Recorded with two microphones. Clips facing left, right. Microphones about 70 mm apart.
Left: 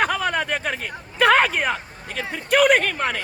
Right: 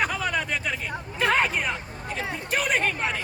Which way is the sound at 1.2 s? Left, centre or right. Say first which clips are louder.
Left 6 dB; left.